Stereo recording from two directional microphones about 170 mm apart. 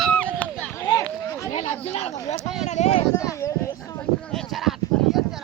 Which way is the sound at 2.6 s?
45° left (ahead or behind).